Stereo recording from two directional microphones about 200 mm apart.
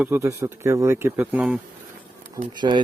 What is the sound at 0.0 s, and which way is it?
Speech, 15° right (ahead or behind).